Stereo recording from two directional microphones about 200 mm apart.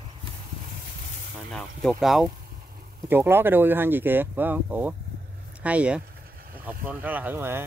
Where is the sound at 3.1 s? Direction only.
10° right (ahead or behind).